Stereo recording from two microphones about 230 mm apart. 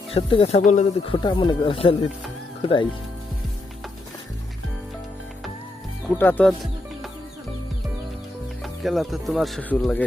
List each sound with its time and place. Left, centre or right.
0.1 s speech: left
1.2 s speech: left
6.1 s speech: centre
8.6 s speech: centre